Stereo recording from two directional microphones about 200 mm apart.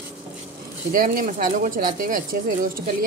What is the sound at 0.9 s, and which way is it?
Speech, 45° right (ahead or behind).